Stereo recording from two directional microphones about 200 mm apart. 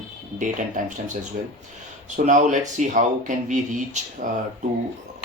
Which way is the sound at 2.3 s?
35° right (ahead or behind).